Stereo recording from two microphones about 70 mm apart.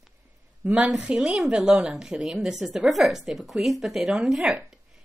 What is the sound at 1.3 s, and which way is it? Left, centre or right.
A woman's voice, centre.